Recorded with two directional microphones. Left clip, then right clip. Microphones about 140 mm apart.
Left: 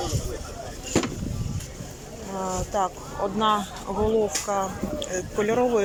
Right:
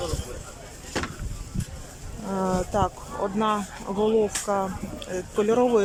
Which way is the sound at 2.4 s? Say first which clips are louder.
Right 1 dB; 25° right (ahead or behind).